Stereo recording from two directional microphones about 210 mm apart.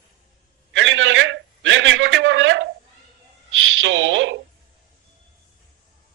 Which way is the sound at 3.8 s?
65° right (ahead or behind).